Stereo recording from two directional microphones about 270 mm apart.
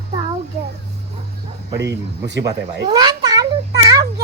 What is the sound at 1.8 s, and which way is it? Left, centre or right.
Speech, right.